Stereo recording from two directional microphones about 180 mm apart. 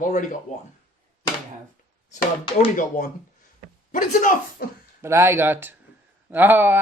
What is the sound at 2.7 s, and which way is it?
A man's voice, 45° left (ahead or behind).